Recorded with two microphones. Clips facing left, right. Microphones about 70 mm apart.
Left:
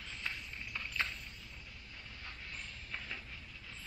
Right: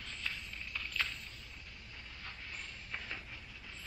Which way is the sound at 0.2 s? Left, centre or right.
Centre.